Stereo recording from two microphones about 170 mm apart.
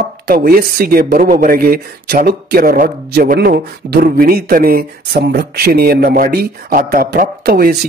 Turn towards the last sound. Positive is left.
turn(degrees=-65)  # may be behind; listen again after turning